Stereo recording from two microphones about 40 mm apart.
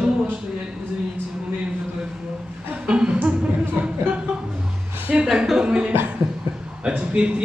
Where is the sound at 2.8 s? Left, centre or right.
Right.